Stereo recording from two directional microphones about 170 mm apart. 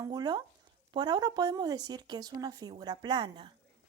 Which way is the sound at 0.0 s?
25° right (ahead or behind).